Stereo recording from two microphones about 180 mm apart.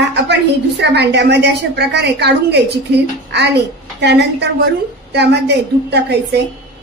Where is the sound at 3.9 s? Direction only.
70° right (ahead or behind).